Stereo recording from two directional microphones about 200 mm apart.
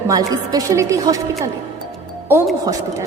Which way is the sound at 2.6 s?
15° right (ahead or behind).